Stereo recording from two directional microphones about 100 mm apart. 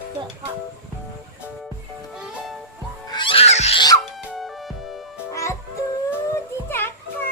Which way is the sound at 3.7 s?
40° left (ahead or behind).